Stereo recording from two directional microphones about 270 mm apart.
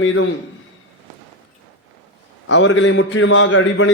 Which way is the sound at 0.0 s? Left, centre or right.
Left.